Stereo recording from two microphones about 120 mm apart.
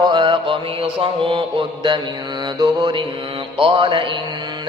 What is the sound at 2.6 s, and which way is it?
Mantra, 35° right (ahead or behind).